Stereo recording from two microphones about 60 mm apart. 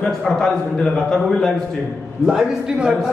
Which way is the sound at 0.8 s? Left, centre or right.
Centre.